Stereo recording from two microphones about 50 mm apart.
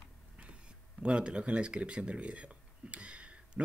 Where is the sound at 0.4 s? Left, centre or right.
Right.